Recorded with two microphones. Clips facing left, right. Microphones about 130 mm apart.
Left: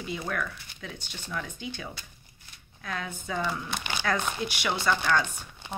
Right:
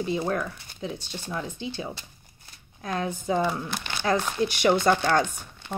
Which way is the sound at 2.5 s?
35° right (ahead or behind).